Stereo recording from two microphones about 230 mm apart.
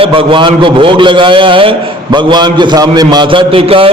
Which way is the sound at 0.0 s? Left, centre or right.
Right.